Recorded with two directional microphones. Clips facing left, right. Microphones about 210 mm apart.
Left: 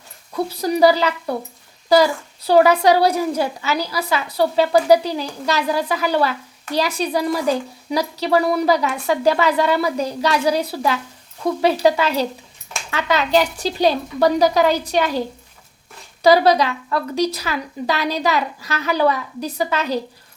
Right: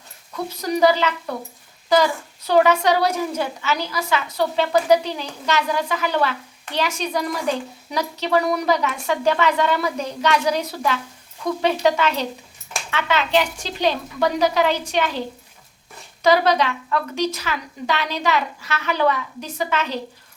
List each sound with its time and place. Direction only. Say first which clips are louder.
0.5 s a woman's voice: left 2 dB; 35° left (ahead or behind)
16.2 s a woman's voice: left 3 dB; 35° left (ahead or behind)